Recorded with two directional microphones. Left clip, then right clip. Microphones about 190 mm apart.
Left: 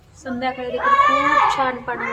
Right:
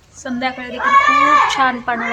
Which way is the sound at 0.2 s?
15° right (ahead or behind).